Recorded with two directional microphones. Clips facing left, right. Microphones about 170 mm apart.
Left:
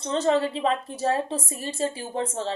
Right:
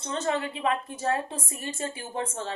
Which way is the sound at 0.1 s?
30° left (ahead or behind).